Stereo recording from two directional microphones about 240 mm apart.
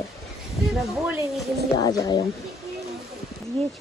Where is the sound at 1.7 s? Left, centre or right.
Centre.